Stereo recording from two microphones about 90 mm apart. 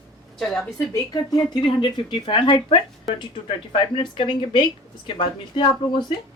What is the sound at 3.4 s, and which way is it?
Speech, 80° left.